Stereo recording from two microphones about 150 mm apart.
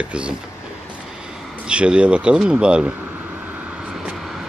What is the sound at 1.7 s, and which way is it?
Speech, 5° right (ahead or behind).